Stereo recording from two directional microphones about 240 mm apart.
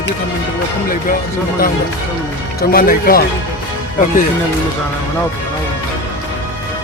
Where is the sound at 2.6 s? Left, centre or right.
Left.